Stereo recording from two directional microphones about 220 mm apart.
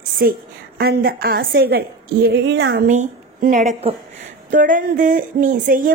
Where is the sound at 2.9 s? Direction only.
35° right (ahead or behind).